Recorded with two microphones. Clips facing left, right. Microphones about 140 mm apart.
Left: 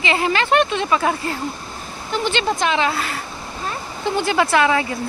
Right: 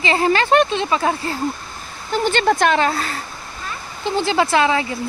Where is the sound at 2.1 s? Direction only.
45° right (ahead or behind).